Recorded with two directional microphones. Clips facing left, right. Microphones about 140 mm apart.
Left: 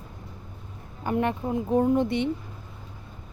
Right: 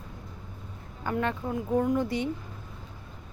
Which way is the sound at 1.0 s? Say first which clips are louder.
Left 4 dB; 20° left (ahead or behind).